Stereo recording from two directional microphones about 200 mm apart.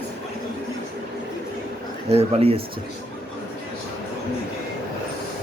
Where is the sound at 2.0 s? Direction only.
30° right (ahead or behind).